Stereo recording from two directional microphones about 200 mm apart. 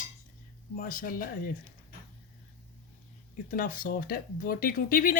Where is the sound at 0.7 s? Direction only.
45° left (ahead or behind).